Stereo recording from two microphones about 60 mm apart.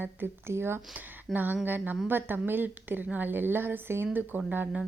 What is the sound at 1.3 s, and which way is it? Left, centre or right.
A woman's voice, right.